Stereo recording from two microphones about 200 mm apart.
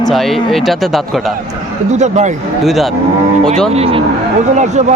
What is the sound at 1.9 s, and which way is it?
Speech, 35° right (ahead or behind).